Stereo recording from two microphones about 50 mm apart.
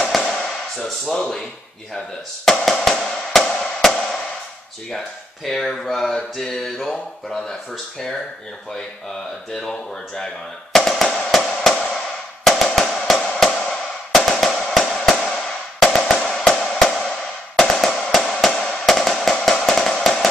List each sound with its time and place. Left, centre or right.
0.0 s a sound: centre
2.0 s music: centre
4.9 s speech: centre
9.5 s speech: centre
11.1 s music: centre
11.3 s a sound: centre
12.4 s music: centre
13.5 s a sound: centre
14.1 s music: centre
17.6 s firecracker: centre